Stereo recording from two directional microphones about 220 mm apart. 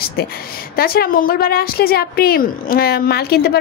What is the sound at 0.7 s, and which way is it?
A woman's voice, 45° left (ahead or behind).